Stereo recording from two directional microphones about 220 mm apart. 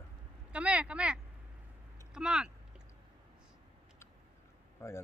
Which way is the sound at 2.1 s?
5° right (ahead or behind).